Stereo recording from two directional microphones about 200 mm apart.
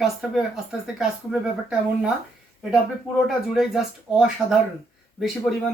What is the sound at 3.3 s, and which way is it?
Speech, centre (ahead or behind).